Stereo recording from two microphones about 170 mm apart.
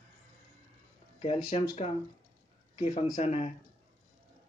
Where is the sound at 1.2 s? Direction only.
35° left (ahead or behind).